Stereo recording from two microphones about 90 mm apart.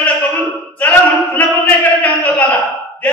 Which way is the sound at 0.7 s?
20° left (ahead or behind).